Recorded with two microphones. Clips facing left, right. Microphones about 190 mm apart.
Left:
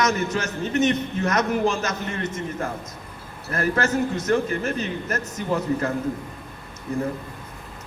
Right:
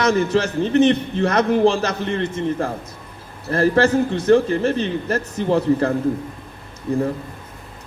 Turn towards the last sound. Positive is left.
turn(degrees=-30)  # may be behind; listen again after turning